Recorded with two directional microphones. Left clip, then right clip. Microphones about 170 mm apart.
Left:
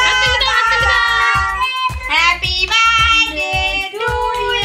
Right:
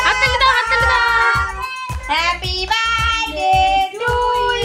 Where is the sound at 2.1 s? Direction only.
80° right.